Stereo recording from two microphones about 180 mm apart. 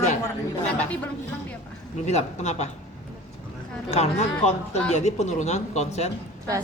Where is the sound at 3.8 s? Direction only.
40° left (ahead or behind).